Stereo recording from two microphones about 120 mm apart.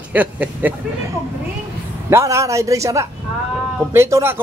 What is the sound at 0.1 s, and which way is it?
A man's voice, 15° right (ahead or behind).